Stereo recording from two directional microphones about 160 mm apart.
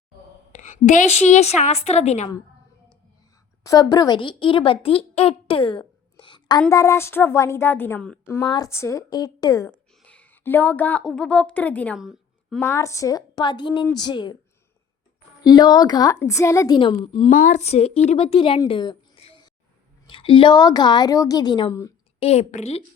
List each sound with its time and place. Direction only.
0.5 s a woman's voice: 50° left (ahead or behind)
3.6 s a woman's voice: 20° left (ahead or behind)
6.1 s a sound: 30° left (ahead or behind)
6.7 s speech: 20° left (ahead or behind)
8.4 s a woman's voice: 25° left (ahead or behind)
10.0 s a woman's voice: 10° left (ahead or behind)
11.9 s a sound: 5° right (ahead or behind)
12.5 s a woman's voice: 15° left (ahead or behind)
15.4 s a woman's voice: 25° left (ahead or behind)
17.3 s a woman's voice: 50° left (ahead or behind)
18.7 s a sound: 30° left (ahead or behind)
20.1 s a woman's voice: 35° left (ahead or behind)
22.2 s a woman's voice: 40° left (ahead or behind)